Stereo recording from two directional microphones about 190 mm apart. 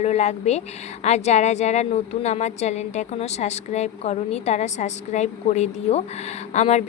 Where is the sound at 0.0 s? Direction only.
35° left (ahead or behind).